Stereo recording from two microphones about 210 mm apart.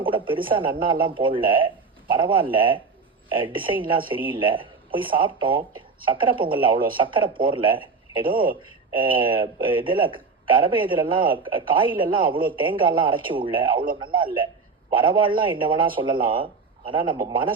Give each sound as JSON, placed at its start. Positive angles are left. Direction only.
{"t": 0.0, "sound": "speech", "side_deg": -25}